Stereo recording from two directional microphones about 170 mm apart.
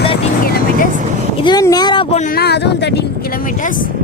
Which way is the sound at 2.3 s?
70° left (ahead or behind).